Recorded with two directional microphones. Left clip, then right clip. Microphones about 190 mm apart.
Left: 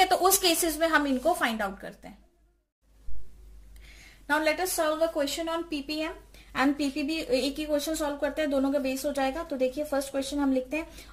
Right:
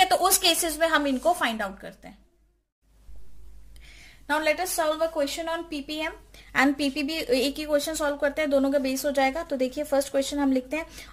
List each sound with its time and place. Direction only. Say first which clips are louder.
0.0 s a woman's voice: right 2 dB; 30° right (ahead or behind)
3.8 s a woman's voice: right 2 dB; 25° right (ahead or behind)
6.5 s a woman's voice: right 4 dB; 50° right (ahead or behind)